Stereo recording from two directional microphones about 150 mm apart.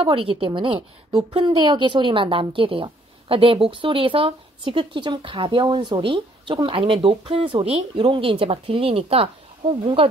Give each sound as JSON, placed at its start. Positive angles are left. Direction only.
{"t": 0.0, "sound": "a woman's voice", "side_deg": -40}